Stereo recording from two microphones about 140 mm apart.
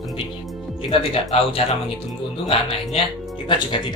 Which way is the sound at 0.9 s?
45° left (ahead or behind).